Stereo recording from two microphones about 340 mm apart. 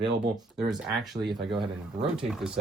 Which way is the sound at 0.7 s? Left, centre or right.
Centre.